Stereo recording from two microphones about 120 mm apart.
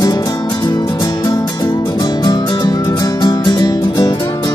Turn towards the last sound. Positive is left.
turn(degrees=35)  # may be behind; listen again after turning